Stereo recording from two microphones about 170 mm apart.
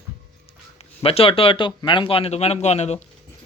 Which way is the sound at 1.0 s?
35° left (ahead or behind).